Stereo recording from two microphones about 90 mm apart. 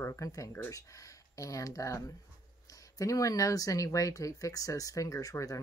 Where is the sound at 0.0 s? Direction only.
35° left (ahead or behind).